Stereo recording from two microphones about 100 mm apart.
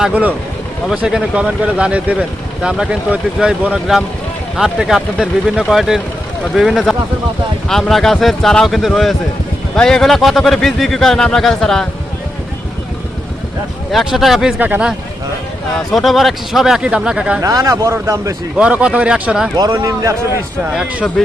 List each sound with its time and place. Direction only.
0.0 s speech: 15° right (ahead or behind); by 11.9 s 5° left (ahead or behind)
13.9 s speech: 5° right (ahead or behind)
14.6 s speech: 15° right (ahead or behind)
15.9 s speech: centre (ahead or behind)
17.4 s speech: 35° right (ahead or behind)
18.5 s speech: 10° right (ahead or behind)
19.5 s speech: 40° right (ahead or behind)